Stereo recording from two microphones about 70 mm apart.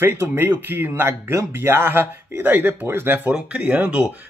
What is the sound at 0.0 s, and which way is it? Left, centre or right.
Speech, right.